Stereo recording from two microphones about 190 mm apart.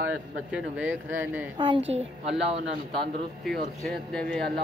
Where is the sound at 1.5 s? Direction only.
25° right (ahead or behind).